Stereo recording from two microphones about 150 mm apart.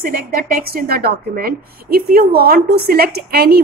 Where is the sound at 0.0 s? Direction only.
75° right (ahead or behind).